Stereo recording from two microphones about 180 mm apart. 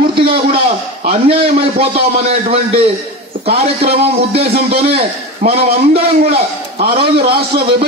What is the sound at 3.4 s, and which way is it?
A man's voice, 35° right (ahead or behind).